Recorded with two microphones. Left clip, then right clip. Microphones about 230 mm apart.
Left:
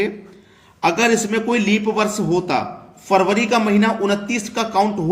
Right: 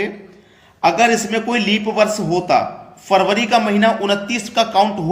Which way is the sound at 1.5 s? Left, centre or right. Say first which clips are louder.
Right 2 dB; right.